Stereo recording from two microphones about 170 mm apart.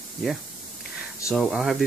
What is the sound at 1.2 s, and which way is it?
Speech, centre (ahead or behind).